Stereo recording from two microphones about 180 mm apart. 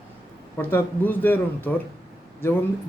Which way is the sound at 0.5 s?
10° left (ahead or behind).